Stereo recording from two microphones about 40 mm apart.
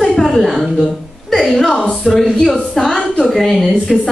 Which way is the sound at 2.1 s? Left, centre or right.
Centre.